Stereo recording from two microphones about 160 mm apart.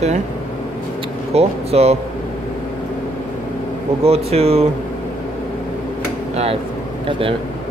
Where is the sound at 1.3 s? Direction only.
40° right (ahead or behind).